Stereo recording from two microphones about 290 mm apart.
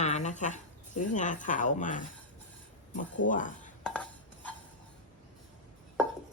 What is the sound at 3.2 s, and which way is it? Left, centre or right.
Speech, left.